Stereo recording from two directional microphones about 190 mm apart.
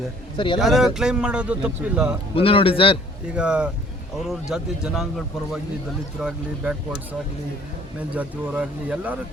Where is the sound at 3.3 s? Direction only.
5° right (ahead or behind).